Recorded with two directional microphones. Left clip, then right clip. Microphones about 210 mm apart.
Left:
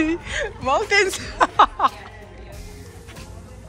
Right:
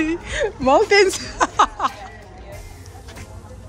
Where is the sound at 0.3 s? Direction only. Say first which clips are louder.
Right 5 dB; 25° right (ahead or behind); by 2.0 s 10° right (ahead or behind).